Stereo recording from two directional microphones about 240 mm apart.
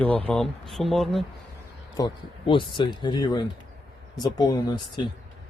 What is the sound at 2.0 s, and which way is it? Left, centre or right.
A man's voice, left.